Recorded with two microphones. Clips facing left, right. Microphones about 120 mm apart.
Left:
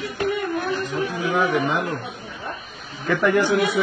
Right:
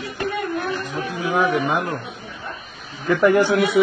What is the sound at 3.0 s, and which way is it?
Speech, 35° right (ahead or behind).